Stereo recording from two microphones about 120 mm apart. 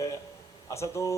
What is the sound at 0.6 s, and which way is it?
Speech, 25° left (ahead or behind).